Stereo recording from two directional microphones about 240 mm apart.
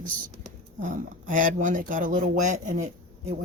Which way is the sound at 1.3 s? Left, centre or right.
Right.